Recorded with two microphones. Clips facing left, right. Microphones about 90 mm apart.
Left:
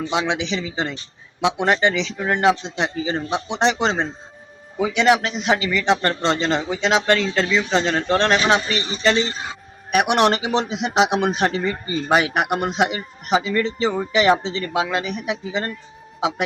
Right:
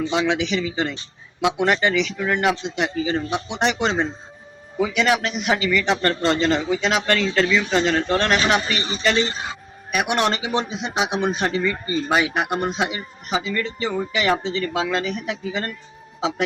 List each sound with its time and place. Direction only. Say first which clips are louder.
0.1 s a man's voice: left 1 dB; 20° left (ahead or behind)
9.9 s a man's voice: left 4 dB; 60° left (ahead or behind)
10.7 s speech: left 5 dB; 70° left (ahead or behind)
11.4 s speech: left 1 dB; 45° left (ahead or behind)
12.1 s a man's voice: left 3 dB; 60° left (ahead or behind)
13.6 s a man's voice: left 3 dB; 30° left (ahead or behind)